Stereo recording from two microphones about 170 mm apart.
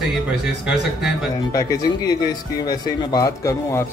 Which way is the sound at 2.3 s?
25° left (ahead or behind).